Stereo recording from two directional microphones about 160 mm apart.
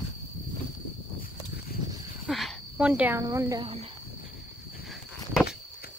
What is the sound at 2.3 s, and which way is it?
Cricket, centre (ahead or behind).